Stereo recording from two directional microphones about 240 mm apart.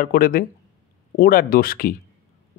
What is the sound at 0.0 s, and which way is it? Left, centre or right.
Speech, left.